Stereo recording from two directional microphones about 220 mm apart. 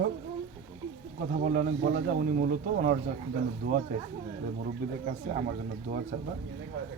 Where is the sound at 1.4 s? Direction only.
40° right (ahead or behind).